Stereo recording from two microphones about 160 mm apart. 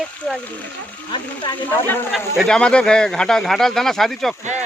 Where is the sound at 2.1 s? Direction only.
Centre (ahead or behind).